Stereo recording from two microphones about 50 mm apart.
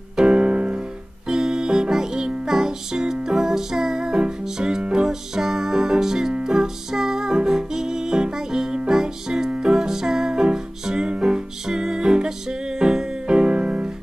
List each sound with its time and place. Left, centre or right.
0.2 s piano: centre
1.3 s music: centre